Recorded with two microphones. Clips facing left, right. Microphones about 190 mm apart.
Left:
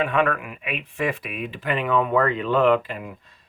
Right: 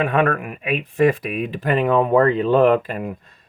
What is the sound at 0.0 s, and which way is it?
Speech, 45° right (ahead or behind).